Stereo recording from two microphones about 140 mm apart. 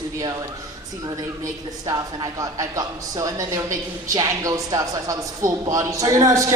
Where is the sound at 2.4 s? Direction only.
25° right (ahead or behind).